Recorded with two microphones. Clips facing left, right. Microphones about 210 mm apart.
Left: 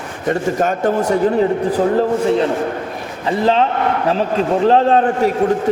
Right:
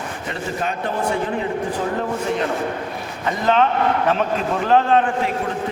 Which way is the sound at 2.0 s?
30° left (ahead or behind).